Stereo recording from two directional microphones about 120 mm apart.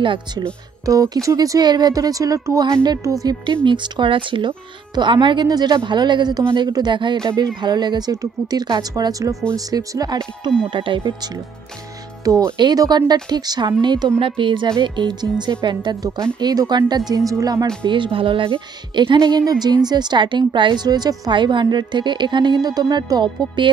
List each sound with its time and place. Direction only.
0.0 s a woman's voice: 45° right (ahead or behind)
0.8 s speech: 30° right (ahead or behind)
3.6 s a woman's voice: 40° right (ahead or behind)
10.7 s a woman's voice: 45° right (ahead or behind)
17.8 s a woman's voice: 45° right (ahead or behind)